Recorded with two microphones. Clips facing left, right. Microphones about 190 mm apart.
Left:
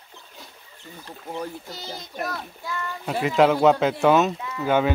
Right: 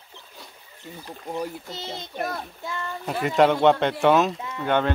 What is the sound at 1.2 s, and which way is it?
Speech, 10° right (ahead or behind).